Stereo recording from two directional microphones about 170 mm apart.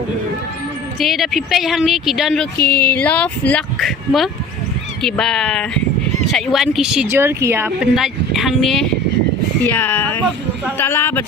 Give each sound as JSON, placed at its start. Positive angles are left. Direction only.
{"t": 0.9, "sound": "speech", "side_deg": 0}
{"t": 2.6, "sound": "a sound", "side_deg": 65}
{"t": 2.9, "sound": "speech", "side_deg": 10}
{"t": 9.6, "sound": "speech", "side_deg": 15}